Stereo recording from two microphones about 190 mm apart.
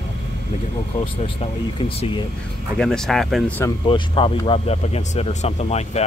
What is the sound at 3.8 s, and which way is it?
Speech, 25° left (ahead or behind).